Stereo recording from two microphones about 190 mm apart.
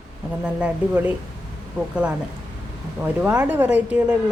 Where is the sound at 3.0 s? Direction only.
10° right (ahead or behind).